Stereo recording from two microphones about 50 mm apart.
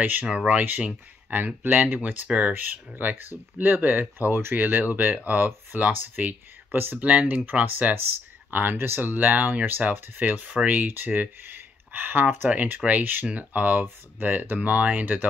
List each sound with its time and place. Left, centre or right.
0.0 s speech: right
1.3 s speech: right
4.2 s speech: right
7.0 s speech: right
13.8 s speech: right